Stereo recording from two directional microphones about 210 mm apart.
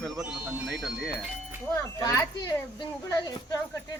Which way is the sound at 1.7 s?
15° left (ahead or behind).